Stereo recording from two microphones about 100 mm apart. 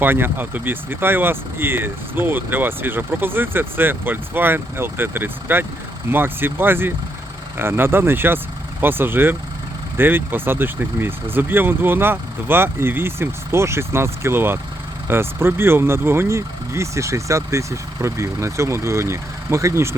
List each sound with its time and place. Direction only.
0.0 s speech: 20° right (ahead or behind)